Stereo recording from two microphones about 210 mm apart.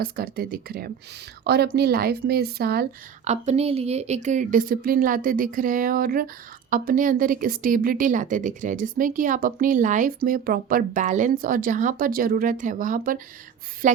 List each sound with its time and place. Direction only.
0.0 s speech: 45° right (ahead or behind)
3.2 s a woman's voice: 30° right (ahead or behind)